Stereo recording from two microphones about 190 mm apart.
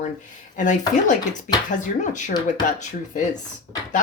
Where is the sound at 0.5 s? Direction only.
40° left (ahead or behind).